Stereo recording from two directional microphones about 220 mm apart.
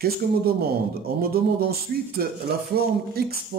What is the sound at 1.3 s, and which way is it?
Speech, 45° right (ahead or behind).